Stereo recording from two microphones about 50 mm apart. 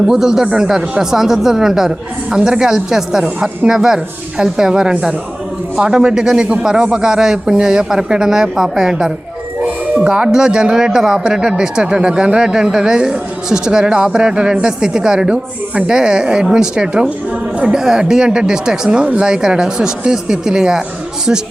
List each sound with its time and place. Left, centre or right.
0.1 s speech: centre
9.6 s music: right
10.0 s speech: centre